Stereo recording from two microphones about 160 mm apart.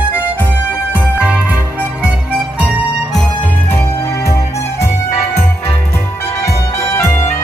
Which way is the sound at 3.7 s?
15° left (ahead or behind).